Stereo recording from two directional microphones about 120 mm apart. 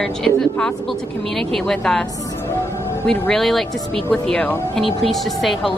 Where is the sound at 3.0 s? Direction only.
10° left (ahead or behind).